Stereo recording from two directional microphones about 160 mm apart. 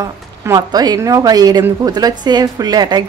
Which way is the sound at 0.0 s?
25° right (ahead or behind).